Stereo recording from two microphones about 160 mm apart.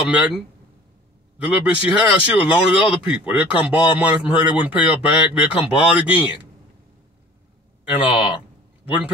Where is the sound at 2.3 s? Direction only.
10° right (ahead or behind).